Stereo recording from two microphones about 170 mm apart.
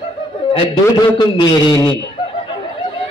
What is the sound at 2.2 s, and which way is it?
Snicker, 30° left (ahead or behind).